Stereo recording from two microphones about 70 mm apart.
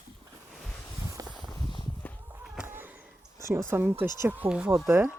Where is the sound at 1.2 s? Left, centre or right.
Right.